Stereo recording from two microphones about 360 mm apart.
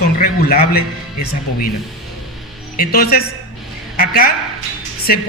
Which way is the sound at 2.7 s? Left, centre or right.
Left.